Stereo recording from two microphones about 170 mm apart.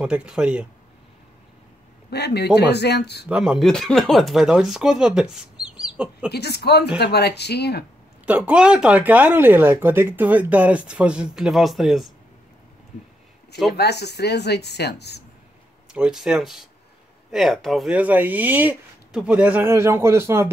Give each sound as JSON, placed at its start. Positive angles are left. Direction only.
{"t": 0.0, "sound": "speech", "side_deg": -5}
{"t": 2.0, "sound": "a woman's voice", "side_deg": 75}
{"t": 3.3, "sound": "speech", "side_deg": -5}
{"t": 6.3, "sound": "a woman's voice", "side_deg": 70}
{"t": 8.3, "sound": "speech", "side_deg": -10}
{"t": 13.7, "sound": "a woman's voice", "side_deg": 75}
{"t": 15.9, "sound": "speech", "side_deg": -5}